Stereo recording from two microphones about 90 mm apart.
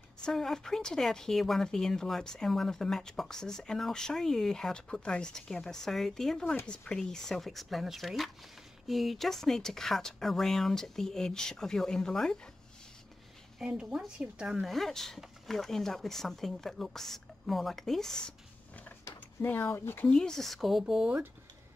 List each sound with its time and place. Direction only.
0.2 s speech: 5° left (ahead or behind)
13.6 s speech: 10° right (ahead or behind); by 18.3 s 5° left (ahead or behind)
19.4 s speech: 25° left (ahead or behind)
20.1 s speech: 5° left (ahead or behind)